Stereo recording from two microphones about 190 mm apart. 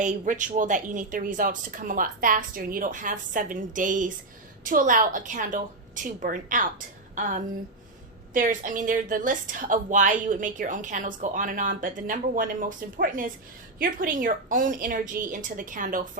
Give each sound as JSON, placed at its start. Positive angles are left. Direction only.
{"t": 0.0, "sound": "a woman's voice", "side_deg": -40}